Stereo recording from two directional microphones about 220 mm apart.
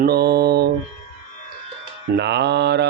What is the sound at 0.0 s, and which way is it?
Mantra, 45° right (ahead or behind).